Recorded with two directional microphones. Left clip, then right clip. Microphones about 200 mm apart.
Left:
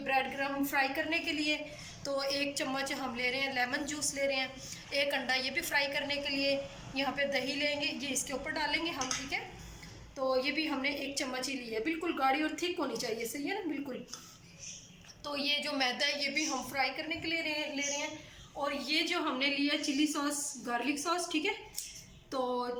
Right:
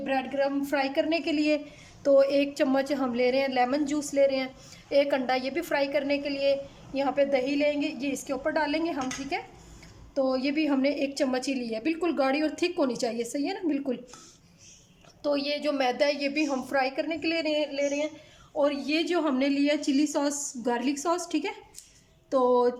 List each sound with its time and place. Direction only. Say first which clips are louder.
0.1 s a woman's voice: right 4 dB; 55° right (ahead or behind)
15.2 s a woman's voice: right 6 dB; 55° right (ahead or behind)